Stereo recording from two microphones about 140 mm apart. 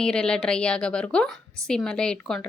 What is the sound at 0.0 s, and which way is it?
A woman's voice, 5° left (ahead or behind).